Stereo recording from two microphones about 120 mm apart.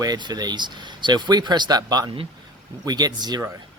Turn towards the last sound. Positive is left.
turn(degrees=-35)  # may be behind; listen again after turning